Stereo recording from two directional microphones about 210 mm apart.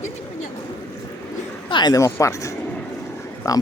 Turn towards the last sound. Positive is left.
turn(degrees=15)  # may be behind; listen again after turning